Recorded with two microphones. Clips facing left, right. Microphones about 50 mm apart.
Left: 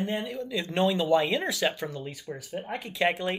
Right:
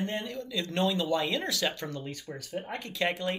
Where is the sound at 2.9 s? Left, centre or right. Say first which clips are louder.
Left 4 dB; left.